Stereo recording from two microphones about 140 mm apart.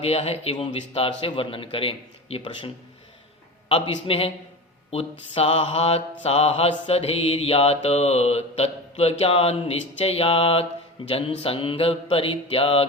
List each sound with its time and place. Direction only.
0.0 s a man's voice: 45° left (ahead or behind)
3.7 s mantra: 40° left (ahead or behind)